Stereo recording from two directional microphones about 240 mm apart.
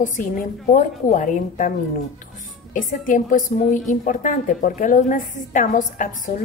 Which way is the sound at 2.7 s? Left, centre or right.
Left.